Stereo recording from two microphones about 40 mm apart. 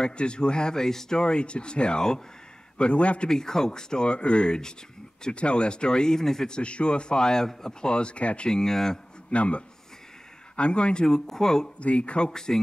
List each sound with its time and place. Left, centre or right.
0.0 s speech: left
2.8 s speech: left
3.3 s speech: centre
6.6 s speech: left
7.9 s speech: left
8.5 s speech: centre
9.3 s speech: left
11.1 s speech: centre
11.8 s speech: left
12.3 s speech: centre